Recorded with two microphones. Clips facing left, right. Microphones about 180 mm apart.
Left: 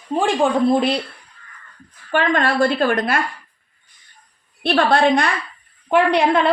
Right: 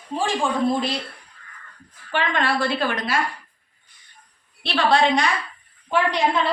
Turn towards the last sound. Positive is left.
turn(degrees=65)  # may be behind; listen again after turning